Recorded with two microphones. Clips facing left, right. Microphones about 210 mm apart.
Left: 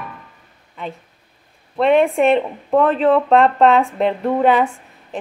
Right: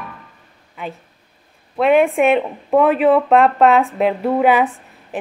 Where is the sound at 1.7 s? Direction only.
5° right (ahead or behind).